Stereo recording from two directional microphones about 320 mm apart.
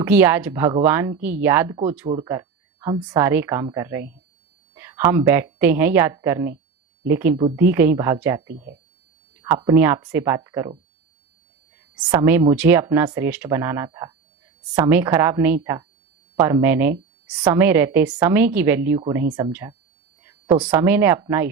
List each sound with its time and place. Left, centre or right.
0.0 s a woman's voice: centre
8.5 s speech: right
9.4 s speech: centre
11.9 s speech: centre